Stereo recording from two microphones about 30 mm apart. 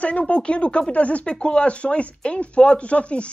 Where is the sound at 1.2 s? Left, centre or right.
Left.